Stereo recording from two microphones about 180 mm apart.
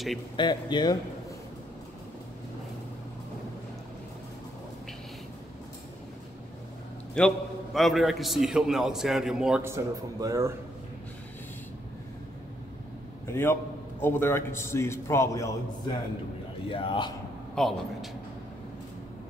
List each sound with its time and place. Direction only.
0.4 s speech: 25° left (ahead or behind)
7.2 s a man's voice: centre (ahead or behind)
9.7 s speech: 15° right (ahead or behind)
13.3 s a man's voice: 15° left (ahead or behind)
16.6 s speech: 30° left (ahead or behind)
17.6 s a man's voice: centre (ahead or behind)